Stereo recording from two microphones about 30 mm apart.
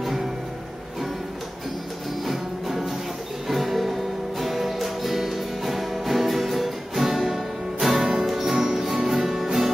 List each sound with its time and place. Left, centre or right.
2.2 s music: centre
8.0 s music: centre
8.3 s music: centre